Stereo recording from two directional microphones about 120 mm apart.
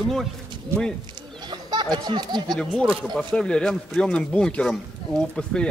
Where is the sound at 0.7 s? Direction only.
20° right (ahead or behind).